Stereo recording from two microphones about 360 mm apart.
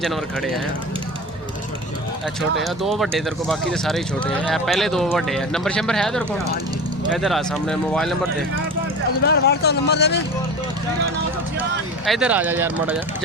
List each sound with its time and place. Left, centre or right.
0.0 s speech: centre
2.6 s speech: centre
9.2 s speech: left
12.0 s speech: centre